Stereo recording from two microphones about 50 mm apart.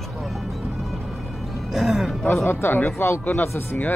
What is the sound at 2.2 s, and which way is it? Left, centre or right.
Speech, left.